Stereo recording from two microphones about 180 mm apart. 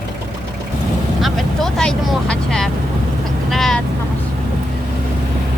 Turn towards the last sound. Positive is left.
turn(degrees=0)  # may be behind; listen again after turning